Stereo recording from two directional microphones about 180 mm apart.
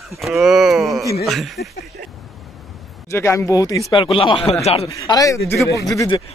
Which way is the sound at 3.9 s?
30° left (ahead or behind).